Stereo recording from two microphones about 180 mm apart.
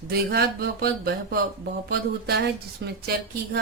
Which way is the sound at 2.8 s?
75° right (ahead or behind).